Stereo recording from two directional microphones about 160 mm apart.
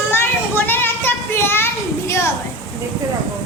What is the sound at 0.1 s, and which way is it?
Children playing, 15° left (ahead or behind).